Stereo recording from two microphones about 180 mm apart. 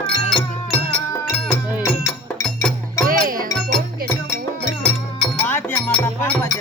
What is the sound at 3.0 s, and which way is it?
Music, 50° right (ahead or behind).